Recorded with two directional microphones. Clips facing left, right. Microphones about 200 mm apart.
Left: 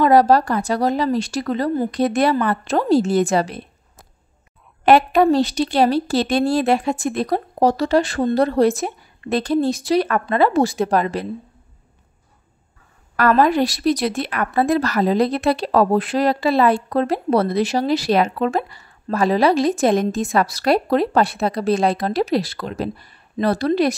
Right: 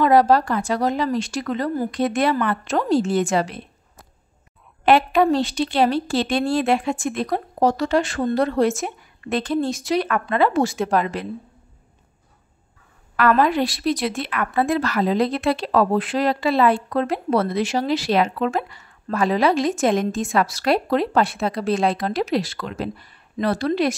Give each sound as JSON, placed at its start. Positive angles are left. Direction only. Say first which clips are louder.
{"t": 0.0, "sound": "speech", "louder": "left 2 dB", "side_deg": 40}
{"t": 4.8, "sound": "speech", "louder": "left 3 dB", "side_deg": 40}
{"t": 13.1, "sound": "speech", "louder": "left 2 dB", "side_deg": 40}